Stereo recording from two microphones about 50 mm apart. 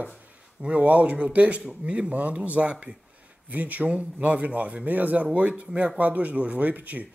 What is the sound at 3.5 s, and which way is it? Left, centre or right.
Speech, right.